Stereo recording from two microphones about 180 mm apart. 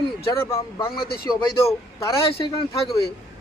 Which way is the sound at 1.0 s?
60° left (ahead or behind).